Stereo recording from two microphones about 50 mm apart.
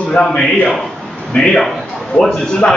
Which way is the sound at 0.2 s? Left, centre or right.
Left.